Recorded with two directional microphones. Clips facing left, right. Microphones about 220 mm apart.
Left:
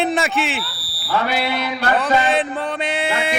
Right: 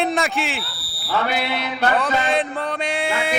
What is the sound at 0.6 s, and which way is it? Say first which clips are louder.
Fire alarm: left 3 dB; 25° right (ahead or behind).